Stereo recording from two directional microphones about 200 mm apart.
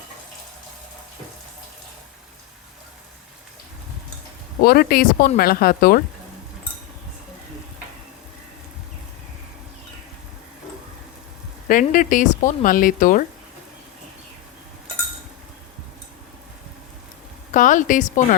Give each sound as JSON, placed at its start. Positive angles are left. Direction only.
{"t": 4.6, "sound": "speech", "side_deg": 50}
{"t": 11.7, "sound": "speech", "side_deg": 40}
{"t": 17.5, "sound": "speech", "side_deg": 40}